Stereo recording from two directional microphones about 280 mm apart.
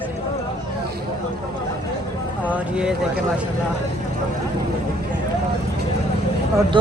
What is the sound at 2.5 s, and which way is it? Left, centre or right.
Speech, centre.